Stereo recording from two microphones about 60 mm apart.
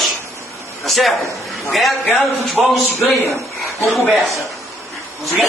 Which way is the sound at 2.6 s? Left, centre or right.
Right.